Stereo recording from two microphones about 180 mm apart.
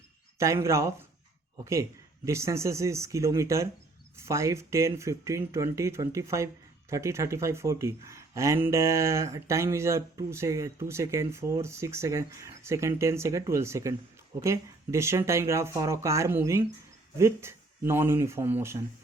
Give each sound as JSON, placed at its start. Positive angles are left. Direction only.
{"t": 0.3, "sound": "speech", "side_deg": -15}